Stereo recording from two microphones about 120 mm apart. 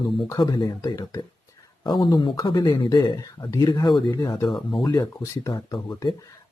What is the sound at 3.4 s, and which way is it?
Speech, 30° left (ahead or behind).